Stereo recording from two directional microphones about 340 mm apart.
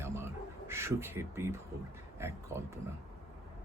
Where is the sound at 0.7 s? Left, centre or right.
Centre.